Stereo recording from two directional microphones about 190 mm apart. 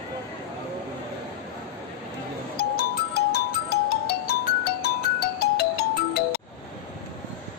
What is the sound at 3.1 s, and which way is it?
Music, 55° left (ahead or behind).